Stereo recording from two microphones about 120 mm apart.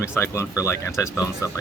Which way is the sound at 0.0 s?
20° left (ahead or behind).